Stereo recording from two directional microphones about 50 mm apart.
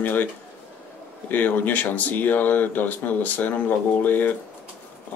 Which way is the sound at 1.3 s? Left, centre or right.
Left.